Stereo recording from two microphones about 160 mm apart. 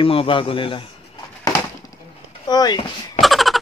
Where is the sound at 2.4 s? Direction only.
25° left (ahead or behind).